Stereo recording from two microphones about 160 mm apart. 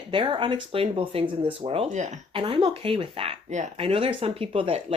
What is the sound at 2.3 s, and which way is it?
Speech, 30° right (ahead or behind).